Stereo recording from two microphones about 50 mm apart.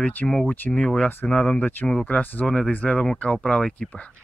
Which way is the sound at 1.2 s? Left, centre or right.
Centre.